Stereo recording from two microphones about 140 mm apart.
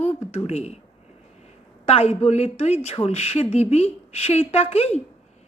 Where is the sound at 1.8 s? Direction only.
45° left (ahead or behind).